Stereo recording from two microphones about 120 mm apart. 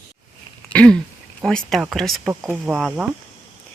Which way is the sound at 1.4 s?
Centre (ahead or behind).